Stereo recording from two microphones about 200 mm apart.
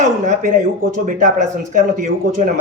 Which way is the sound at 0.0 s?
40° right (ahead or behind).